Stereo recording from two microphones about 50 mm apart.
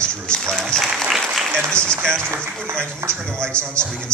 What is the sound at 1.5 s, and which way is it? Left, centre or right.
Speech, centre.